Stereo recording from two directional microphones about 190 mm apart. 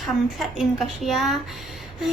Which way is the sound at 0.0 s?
Centre (ahead or behind).